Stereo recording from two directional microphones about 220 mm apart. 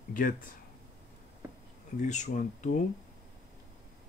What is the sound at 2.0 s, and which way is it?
Speech, 35° left (ahead or behind).